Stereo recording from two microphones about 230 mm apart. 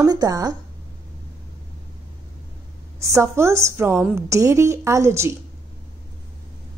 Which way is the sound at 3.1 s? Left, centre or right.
Centre.